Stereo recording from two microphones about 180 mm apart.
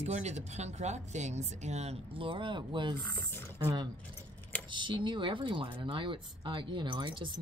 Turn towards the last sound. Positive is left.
turn(degrees=-25)  # may be behind; listen again after turning